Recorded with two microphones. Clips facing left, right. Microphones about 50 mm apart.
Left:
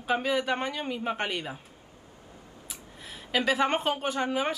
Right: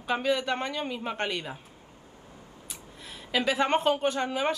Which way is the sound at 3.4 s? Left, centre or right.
Centre.